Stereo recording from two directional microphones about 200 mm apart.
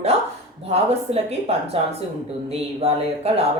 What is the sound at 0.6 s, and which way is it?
Speech, 30° right (ahead or behind).